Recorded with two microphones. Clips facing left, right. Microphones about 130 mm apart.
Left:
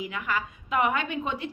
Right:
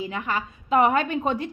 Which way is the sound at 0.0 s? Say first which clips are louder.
Right 3 dB; 30° right (ahead or behind).